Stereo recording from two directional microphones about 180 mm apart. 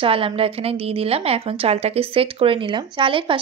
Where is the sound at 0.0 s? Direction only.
30° right (ahead or behind).